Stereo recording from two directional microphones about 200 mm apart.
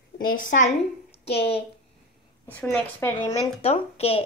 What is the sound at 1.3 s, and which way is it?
Speech, 30° left (ahead or behind).